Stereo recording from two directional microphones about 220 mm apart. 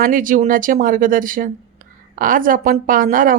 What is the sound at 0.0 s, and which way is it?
Speech, 40° right (ahead or behind).